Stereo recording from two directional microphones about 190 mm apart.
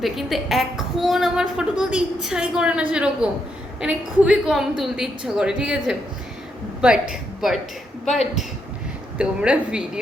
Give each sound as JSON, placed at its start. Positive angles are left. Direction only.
{"t": 0.0, "sound": "a woman's voice", "side_deg": 0}
{"t": 7.1, "sound": "a woman's voice", "side_deg": 0}